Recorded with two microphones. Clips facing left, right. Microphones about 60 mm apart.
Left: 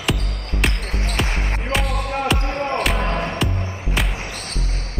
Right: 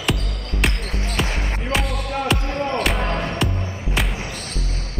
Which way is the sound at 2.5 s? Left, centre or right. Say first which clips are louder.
Even; left.